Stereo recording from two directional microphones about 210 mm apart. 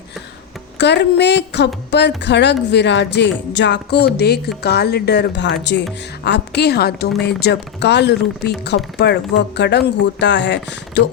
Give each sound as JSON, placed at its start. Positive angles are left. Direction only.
{"t": 0.8, "sound": "speech", "side_deg": 55}